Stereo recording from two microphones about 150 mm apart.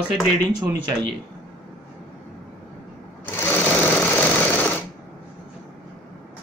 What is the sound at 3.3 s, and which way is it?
Sewing machine, 15° left (ahead or behind).